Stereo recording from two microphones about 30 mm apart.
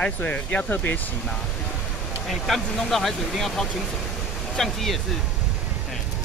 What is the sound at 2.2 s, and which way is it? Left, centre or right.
Speech, centre.